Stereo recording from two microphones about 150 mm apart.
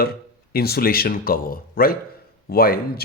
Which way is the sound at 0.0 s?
90° left.